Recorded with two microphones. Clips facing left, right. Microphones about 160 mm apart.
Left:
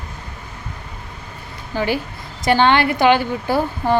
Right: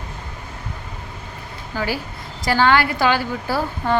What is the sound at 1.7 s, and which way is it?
Speech, 20° left (ahead or behind).